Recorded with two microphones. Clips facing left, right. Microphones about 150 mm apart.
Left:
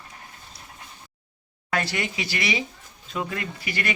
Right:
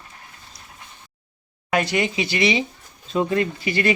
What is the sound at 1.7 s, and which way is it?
Speech, 20° right (ahead or behind).